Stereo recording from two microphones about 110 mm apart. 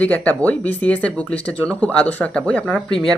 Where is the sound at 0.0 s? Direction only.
15° left (ahead or behind).